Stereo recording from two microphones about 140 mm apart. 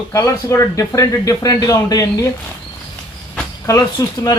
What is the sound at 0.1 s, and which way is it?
Speech, 25° left (ahead or behind).